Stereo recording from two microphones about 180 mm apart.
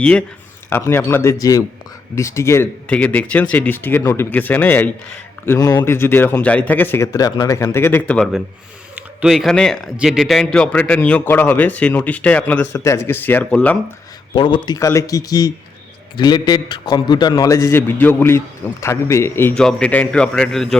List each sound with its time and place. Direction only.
0.0 s a man's voice: 5° left (ahead or behind)
14.3 s a man's voice: 25° left (ahead or behind); by 20.7 s centre (ahead or behind)